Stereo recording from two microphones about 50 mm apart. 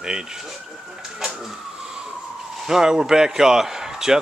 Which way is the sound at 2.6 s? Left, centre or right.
Centre.